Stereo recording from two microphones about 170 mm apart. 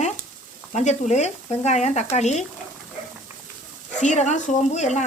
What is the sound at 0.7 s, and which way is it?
Frying, 45° left (ahead or behind).